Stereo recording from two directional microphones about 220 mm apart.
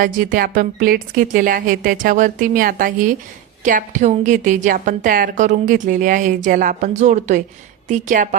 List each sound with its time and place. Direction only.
0.0 s a woman's voice: 40° right (ahead or behind)